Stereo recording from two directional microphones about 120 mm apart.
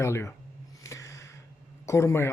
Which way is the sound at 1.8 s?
20° left (ahead or behind).